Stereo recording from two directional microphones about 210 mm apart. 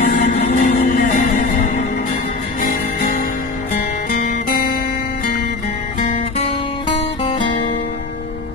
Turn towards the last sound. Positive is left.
turn(degrees=25)  # may be behind; listen again after turning